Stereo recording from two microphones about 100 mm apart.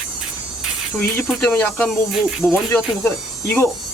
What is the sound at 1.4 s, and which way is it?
Speech, 15° left (ahead or behind).